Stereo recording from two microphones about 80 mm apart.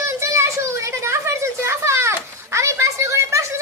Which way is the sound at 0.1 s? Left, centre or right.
Right.